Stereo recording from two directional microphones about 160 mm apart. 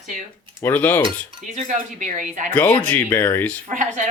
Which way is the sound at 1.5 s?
50° right (ahead or behind).